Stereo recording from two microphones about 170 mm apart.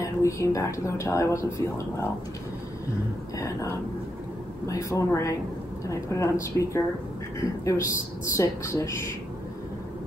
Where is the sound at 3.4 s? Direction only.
15° left (ahead or behind).